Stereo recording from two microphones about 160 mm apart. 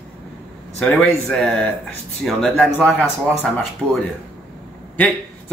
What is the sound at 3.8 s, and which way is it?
Speech, 15° right (ahead or behind).